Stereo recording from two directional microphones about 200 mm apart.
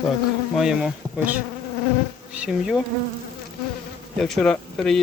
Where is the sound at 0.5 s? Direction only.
5° right (ahead or behind).